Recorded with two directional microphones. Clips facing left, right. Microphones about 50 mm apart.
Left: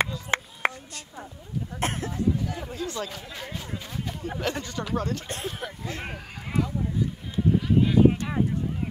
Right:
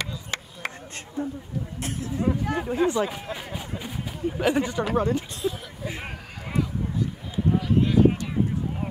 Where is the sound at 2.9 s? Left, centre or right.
Right.